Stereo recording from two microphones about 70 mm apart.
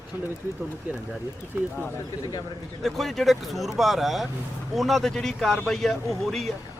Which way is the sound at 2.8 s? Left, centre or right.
Centre.